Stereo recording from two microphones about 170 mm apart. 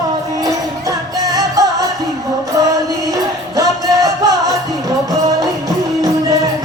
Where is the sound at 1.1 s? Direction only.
20° right (ahead or behind).